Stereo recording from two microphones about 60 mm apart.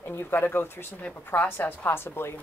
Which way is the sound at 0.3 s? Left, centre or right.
Left.